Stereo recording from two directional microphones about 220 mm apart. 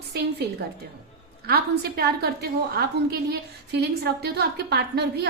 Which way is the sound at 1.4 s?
45° right (ahead or behind).